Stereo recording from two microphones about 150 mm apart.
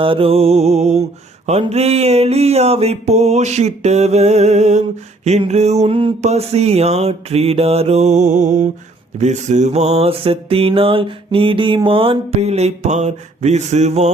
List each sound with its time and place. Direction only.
0.0 s mantra: 35° right (ahead or behind)